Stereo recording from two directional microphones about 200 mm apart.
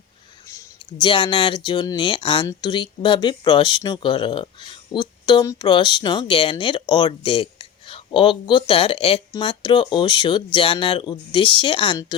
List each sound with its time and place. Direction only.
0.4 s speech: 20° left (ahead or behind)